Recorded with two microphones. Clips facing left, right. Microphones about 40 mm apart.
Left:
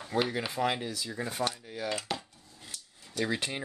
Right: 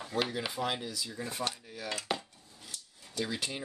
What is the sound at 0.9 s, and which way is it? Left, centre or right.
Speech, left.